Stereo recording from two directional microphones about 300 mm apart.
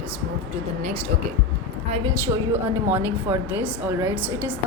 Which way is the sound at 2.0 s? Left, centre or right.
Centre.